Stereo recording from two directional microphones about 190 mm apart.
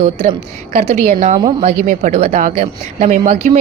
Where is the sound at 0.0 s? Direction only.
35° right (ahead or behind).